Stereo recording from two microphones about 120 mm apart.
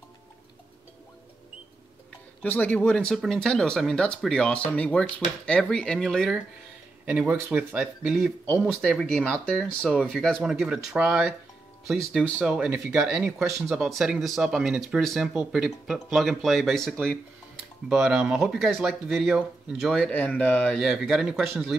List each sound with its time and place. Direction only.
2.4 s speech: 15° left (ahead or behind)
7.1 s speech: 10° right (ahead or behind)
8.8 s speech: 5° left (ahead or behind)
12.4 s speech: 10° right (ahead or behind)
20.1 s speech: 10° left (ahead or behind)
20.8 s speech: centre (ahead or behind)